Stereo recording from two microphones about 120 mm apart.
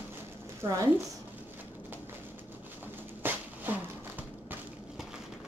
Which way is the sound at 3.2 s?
15° right (ahead or behind).